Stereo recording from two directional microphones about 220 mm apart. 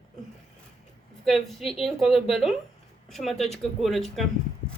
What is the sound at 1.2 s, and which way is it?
A woman's voice, centre (ahead or behind).